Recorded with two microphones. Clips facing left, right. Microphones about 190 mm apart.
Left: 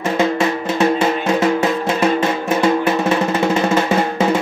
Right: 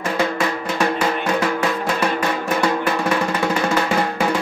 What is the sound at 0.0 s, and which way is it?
Drum, 25° left (ahead or behind).